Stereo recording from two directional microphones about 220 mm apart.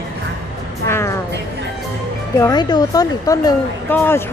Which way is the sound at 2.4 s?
20° left (ahead or behind).